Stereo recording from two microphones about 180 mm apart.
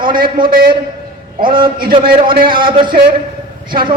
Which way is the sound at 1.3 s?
25° right (ahead or behind).